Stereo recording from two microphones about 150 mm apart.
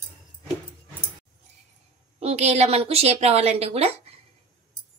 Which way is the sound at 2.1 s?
45° right (ahead or behind).